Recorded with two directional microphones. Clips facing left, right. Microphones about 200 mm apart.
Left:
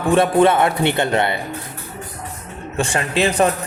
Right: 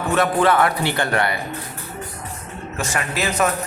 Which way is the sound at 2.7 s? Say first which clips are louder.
Left 5 dB; 30° left (ahead or behind).